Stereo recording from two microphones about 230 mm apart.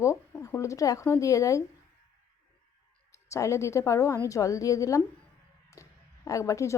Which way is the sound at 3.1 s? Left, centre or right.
Centre.